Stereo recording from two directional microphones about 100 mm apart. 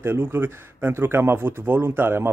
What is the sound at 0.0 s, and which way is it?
Speech, 20° right (ahead or behind).